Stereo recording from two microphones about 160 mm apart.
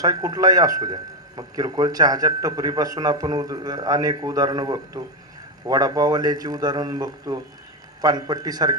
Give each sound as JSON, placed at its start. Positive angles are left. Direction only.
{"t": 0.0, "sound": "a man's voice", "side_deg": -25}